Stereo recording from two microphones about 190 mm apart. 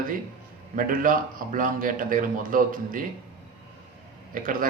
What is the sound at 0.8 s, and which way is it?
A man's voice, 45° right (ahead or behind).